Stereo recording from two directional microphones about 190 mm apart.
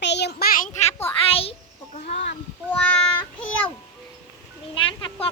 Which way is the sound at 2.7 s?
10° left (ahead or behind).